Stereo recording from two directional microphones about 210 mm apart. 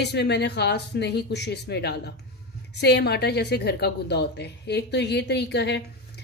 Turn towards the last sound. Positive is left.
turn(degrees=55)  # may be behind; listen again after turning